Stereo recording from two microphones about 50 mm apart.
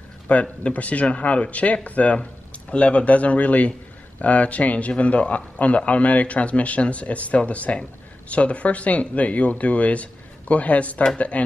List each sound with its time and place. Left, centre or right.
0.3 s a man's voice: left